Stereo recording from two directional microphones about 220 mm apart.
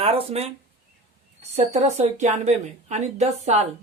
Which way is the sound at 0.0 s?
25° right (ahead or behind).